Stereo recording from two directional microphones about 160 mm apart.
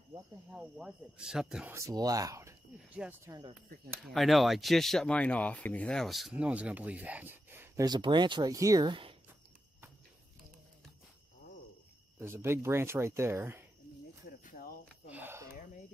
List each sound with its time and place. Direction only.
0.5 s speech: 5° right (ahead or behind)
1.8 s speech: 20° right (ahead or behind)
4.1 s speech: centre (ahead or behind)
7.8 s speech: 30° right (ahead or behind)
12.2 s speech: 15° right (ahead or behind)
14.4 s cricket: 60° left (ahead or behind)
15.0 s a sound: 10° right (ahead or behind)